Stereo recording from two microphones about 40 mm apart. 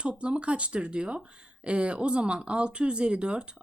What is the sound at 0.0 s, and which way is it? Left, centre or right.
Speech, right.